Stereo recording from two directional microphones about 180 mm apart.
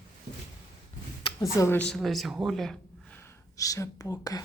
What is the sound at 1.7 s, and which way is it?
Speech, 5° left (ahead or behind).